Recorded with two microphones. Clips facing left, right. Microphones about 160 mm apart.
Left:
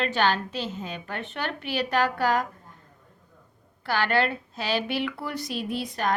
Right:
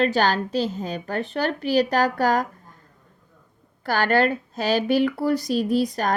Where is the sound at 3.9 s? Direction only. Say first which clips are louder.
Right 4 dB; 45° right (ahead or behind).